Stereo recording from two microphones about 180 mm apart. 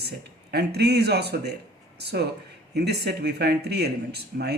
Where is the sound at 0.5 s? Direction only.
65° right (ahead or behind).